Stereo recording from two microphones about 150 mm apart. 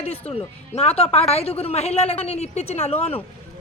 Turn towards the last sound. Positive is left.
turn(degrees=40)  # may be behind; listen again after turning